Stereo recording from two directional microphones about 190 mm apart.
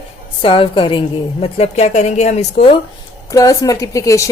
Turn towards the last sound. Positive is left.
turn(degrees=15)  # may be behind; listen again after turning